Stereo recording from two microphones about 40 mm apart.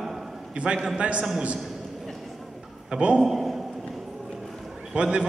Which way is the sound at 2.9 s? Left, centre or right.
Right.